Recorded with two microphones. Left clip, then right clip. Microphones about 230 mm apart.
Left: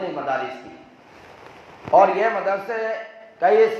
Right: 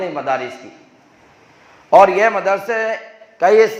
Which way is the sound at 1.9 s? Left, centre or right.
Right.